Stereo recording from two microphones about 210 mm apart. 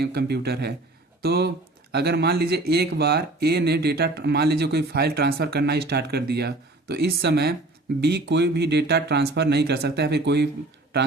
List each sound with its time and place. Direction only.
0.0 s speech: 50° right (ahead or behind)